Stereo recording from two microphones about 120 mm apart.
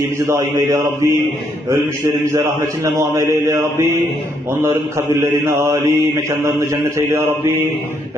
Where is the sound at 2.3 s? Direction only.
25° right (ahead or behind).